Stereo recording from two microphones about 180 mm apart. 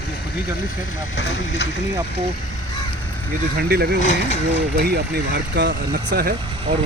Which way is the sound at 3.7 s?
60° right (ahead or behind).